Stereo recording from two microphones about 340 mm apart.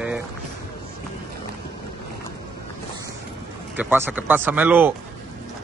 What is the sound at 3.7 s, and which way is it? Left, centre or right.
Speech, centre.